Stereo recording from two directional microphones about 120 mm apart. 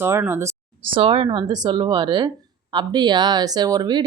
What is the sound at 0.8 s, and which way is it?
Speech, 50° right (ahead or behind).